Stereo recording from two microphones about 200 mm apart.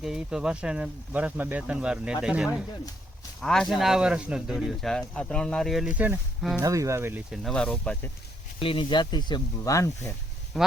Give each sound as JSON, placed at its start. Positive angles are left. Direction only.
{"t": 0.0, "sound": "speech", "side_deg": -5}
{"t": 6.6, "sound": "speech", "side_deg": -15}
{"t": 7.3, "sound": "speech", "side_deg": 0}
{"t": 8.5, "sound": "speech", "side_deg": 25}